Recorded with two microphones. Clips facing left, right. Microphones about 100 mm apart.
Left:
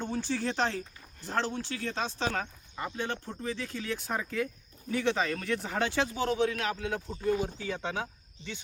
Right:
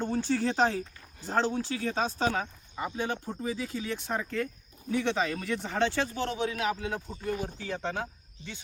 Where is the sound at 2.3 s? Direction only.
10° right (ahead or behind).